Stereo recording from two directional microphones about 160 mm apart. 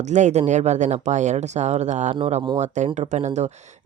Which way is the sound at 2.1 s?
35° right (ahead or behind).